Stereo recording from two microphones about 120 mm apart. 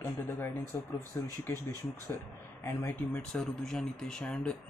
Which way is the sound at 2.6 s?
20° left (ahead or behind).